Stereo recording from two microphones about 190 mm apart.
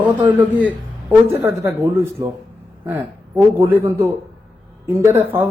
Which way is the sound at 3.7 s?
10° right (ahead or behind).